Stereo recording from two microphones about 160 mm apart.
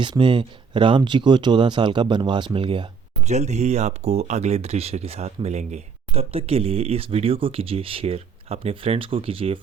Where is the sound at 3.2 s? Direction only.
45° right (ahead or behind).